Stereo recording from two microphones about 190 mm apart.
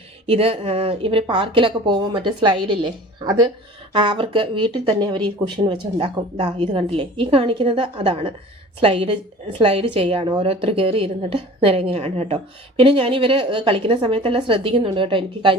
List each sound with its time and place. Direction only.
0.3 s a woman's voice: 30° right (ahead or behind)